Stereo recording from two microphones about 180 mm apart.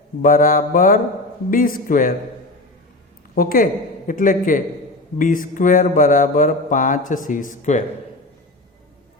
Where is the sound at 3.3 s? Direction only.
55° left (ahead or behind).